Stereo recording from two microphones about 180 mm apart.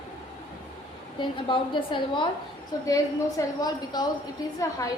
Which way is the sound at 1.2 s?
25° left (ahead or behind).